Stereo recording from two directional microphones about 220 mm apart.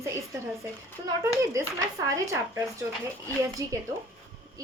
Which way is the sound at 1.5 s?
15° right (ahead or behind).